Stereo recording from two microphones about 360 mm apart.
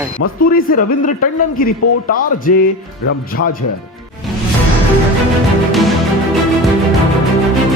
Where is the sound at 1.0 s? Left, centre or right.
Left.